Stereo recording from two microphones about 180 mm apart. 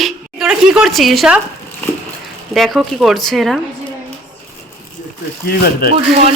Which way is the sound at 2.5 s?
Centre (ahead or behind).